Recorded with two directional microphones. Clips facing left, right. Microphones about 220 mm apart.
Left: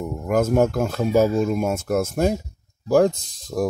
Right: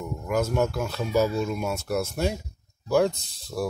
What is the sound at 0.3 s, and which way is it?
Speech, 50° left (ahead or behind).